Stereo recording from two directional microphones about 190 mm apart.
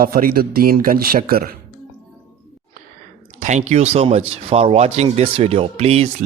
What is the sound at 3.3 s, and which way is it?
Speech, 40° right (ahead or behind).